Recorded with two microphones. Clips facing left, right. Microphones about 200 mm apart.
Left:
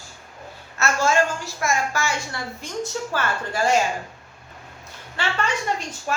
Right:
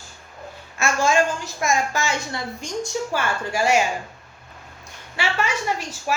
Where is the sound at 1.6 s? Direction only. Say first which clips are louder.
Right 2 dB; 20° right (ahead or behind).